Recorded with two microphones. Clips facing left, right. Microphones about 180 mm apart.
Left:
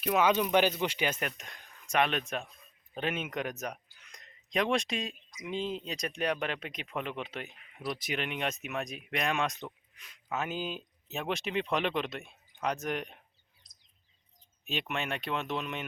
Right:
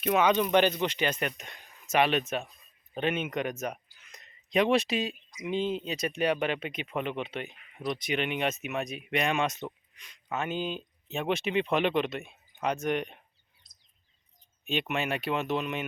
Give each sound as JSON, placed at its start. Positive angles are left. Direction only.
{"t": 0.0, "sound": "speech", "side_deg": 5}
{"t": 14.6, "sound": "speech", "side_deg": 0}